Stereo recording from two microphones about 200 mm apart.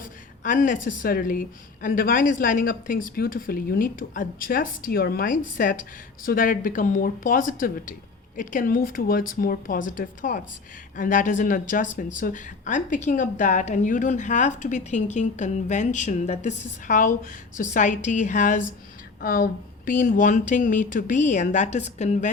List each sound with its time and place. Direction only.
0.4 s a woman's voice: 40° left (ahead or behind)